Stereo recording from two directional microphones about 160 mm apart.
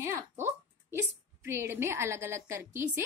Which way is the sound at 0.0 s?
15° right (ahead or behind).